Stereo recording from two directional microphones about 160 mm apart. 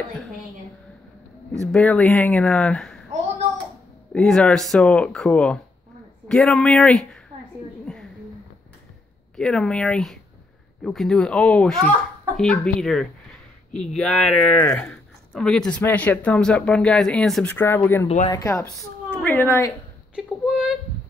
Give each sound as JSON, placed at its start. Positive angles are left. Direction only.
{"t": 1.5, "sound": "speech", "side_deg": 5}
{"t": 4.1, "sound": "speech", "side_deg": 5}
{"t": 7.8, "sound": "a sound", "side_deg": 5}
{"t": 9.4, "sound": "speech", "side_deg": 5}
{"t": 20.2, "sound": "speech", "side_deg": -5}